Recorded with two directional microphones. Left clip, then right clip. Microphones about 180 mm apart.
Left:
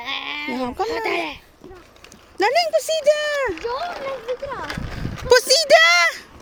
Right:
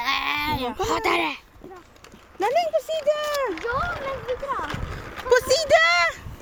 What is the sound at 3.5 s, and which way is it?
Speech, 30° left (ahead or behind).